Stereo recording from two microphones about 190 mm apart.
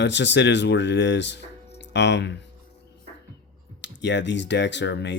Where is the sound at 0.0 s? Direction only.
65° left (ahead or behind).